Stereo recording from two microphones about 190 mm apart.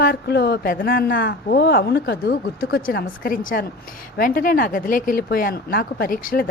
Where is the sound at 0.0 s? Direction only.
55° left (ahead or behind).